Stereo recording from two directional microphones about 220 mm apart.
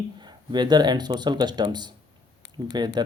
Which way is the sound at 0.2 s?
20° right (ahead or behind).